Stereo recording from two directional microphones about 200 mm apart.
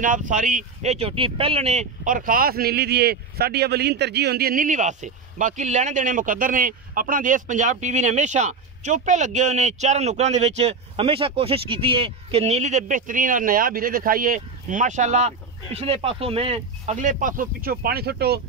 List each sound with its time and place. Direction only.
0.0 s speech: 40° right (ahead or behind)